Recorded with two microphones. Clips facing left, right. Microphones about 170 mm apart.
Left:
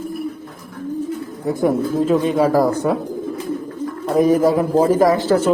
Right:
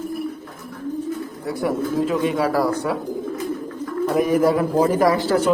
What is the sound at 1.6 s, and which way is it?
Speech, 35° left (ahead or behind).